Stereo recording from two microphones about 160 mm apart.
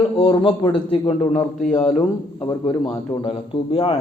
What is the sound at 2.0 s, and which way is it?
A man's voice, 30° left (ahead or behind).